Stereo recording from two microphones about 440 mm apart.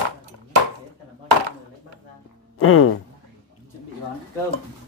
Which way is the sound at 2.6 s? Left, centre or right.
Left.